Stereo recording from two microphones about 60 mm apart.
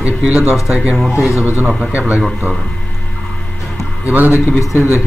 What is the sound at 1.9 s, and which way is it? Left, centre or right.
Speech, right.